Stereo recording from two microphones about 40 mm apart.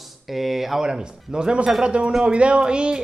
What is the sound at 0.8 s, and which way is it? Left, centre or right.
A woman's voice, centre.